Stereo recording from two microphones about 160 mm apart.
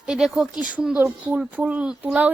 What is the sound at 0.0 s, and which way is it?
A woman's voice, 5° right (ahead or behind).